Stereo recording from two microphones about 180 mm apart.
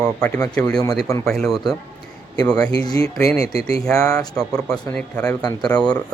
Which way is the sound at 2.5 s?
20° left (ahead or behind).